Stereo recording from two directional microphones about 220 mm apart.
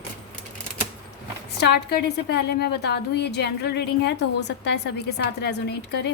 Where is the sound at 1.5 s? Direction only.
45° left (ahead or behind).